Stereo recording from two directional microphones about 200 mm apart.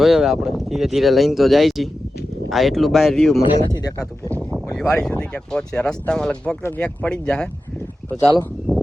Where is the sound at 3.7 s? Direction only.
20° left (ahead or behind).